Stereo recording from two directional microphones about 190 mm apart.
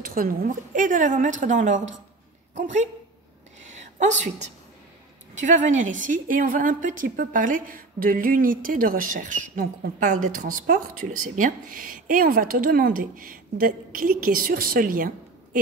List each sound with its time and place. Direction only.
0.0 s a woman's voice: 50° right (ahead or behind)
4.0 s a woman's voice: 40° right (ahead or behind)